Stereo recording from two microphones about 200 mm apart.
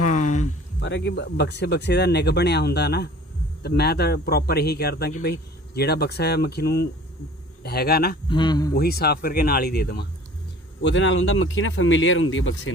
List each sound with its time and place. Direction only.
0.0 s a sound: 40° left (ahead or behind)
0.8 s speech: 60° left (ahead or behind)
8.3 s speech: 20° left (ahead or behind)
8.7 s speech: 50° left (ahead or behind)
10.8 s speech: 65° left (ahead or behind)